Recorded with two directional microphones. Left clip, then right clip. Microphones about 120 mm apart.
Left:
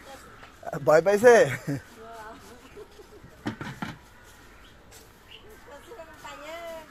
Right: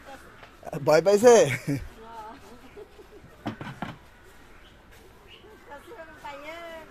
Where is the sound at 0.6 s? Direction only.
40° right (ahead or behind).